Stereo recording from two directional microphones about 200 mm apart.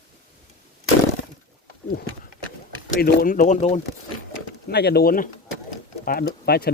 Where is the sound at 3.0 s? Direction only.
45° left (ahead or behind).